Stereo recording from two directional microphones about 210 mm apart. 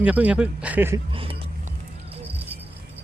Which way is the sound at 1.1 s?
25° right (ahead or behind).